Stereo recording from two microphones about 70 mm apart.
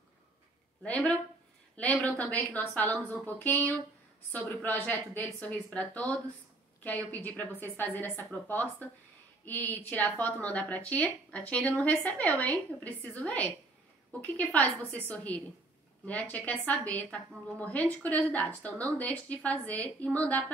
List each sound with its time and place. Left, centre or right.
0.8 s speech: centre
5.4 s speech: centre